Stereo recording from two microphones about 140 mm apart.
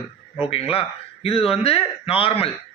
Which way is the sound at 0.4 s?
40° left (ahead or behind).